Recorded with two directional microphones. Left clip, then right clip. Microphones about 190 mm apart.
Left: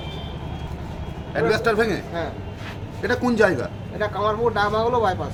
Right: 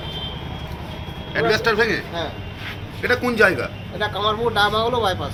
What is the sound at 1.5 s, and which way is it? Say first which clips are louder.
Speech: right 2 dB; 55° left (ahead or behind).